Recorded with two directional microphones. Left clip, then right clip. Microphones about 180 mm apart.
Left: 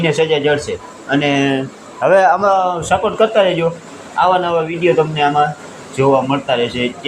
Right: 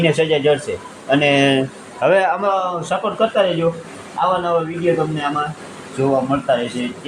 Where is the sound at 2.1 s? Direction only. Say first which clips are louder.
Left 6 dB; 15° left (ahead or behind).